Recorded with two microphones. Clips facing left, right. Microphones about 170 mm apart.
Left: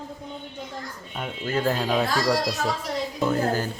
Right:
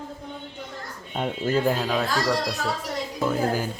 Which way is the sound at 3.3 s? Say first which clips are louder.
Right 1 dB; 10° right (ahead or behind).